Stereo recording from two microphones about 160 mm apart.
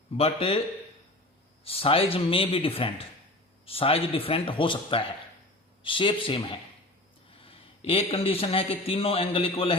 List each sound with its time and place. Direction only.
0.2 s a man's voice: 35° left (ahead or behind)
1.6 s a man's voice: 35° left (ahead or behind)